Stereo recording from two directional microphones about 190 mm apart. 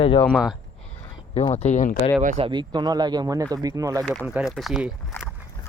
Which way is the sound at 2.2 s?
40° right (ahead or behind).